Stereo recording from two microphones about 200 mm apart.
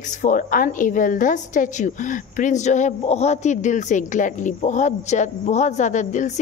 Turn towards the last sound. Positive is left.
turn(degrees=35)  # may be behind; listen again after turning